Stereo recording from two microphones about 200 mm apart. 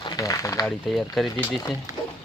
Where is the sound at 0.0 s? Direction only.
20° left (ahead or behind).